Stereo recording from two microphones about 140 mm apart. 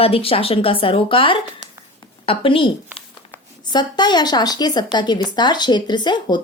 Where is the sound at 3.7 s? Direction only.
30° left (ahead or behind).